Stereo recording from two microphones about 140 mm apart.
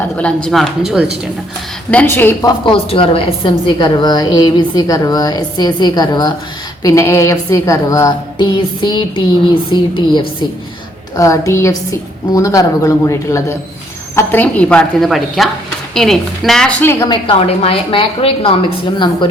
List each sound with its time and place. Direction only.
0.4 s speech: centre (ahead or behind)
1.9 s a woman's voice: 10° left (ahead or behind)
2.5 s a woman's voice: 40° left (ahead or behind)
11.2 s a woman's voice: 20° left (ahead or behind); by 16.7 s 5° left (ahead or behind)
16.8 s a woman's voice: 15° left (ahead or behind)
17.1 s a woman's voice: 40° left (ahead or behind)